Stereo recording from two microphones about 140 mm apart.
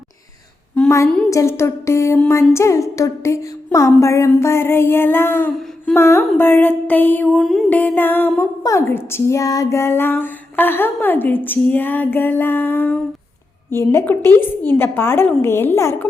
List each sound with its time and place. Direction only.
0.9 s a sound: 20° left (ahead or behind)
4.3 s speech: 20° left (ahead or behind)
7.3 s music: centre (ahead or behind)
7.7 s speech: 10° left (ahead or behind)